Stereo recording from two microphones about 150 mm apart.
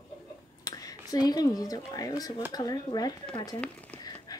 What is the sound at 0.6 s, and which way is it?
A woman's voice, 25° left (ahead or behind).